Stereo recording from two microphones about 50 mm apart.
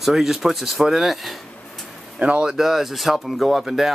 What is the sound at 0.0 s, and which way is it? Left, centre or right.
Speech, centre.